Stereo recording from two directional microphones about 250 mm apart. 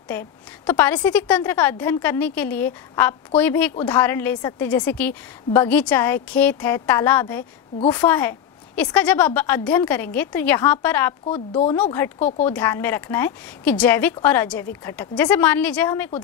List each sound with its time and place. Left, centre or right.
0.7 s a woman's voice: centre
11.2 s a woman's voice: left
11.7 s a woman's voice: centre
12.2 s a woman's voice: left
12.4 s a woman's voice: centre